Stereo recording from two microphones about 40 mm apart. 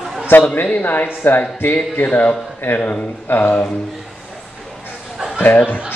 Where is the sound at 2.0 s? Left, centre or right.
Left.